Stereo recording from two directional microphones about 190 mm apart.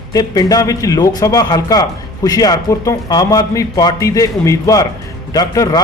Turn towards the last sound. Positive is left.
turn(degrees=20)  # may be behind; listen again after turning